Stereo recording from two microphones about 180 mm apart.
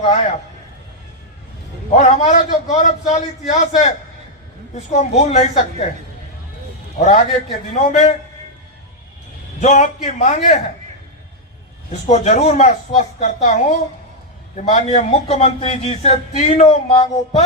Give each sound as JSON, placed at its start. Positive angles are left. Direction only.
{"t": 0.0, "sound": "a man's voice", "side_deg": 40}
{"t": 2.0, "sound": "a man's voice", "side_deg": 40}
{"t": 7.0, "sound": "a man's voice", "side_deg": 40}
{"t": 9.6, "sound": "a man's voice", "side_deg": 40}
{"t": 12.0, "sound": "a man's voice", "side_deg": 40}